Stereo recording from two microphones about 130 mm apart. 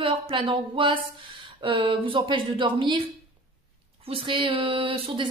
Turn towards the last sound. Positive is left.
turn(degrees=-40)  # may be behind; listen again after turning